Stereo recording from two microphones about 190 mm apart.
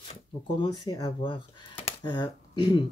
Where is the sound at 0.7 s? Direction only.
20° left (ahead or behind).